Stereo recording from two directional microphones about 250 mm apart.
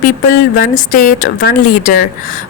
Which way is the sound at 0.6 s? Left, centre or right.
Left.